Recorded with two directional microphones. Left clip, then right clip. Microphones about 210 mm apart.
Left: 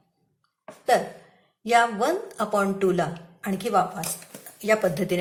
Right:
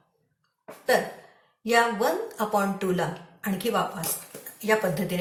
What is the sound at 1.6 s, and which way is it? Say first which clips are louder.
Speech: left 2 dB; 40° left (ahead or behind).